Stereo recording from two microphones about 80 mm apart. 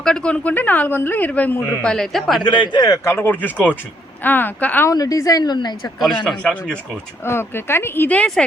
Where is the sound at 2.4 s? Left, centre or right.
Left.